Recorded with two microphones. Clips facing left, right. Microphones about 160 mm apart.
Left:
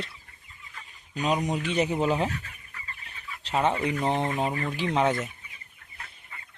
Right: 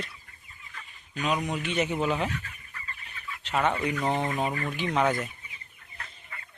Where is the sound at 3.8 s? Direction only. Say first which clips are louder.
Left 1 dB; 30° left (ahead or behind).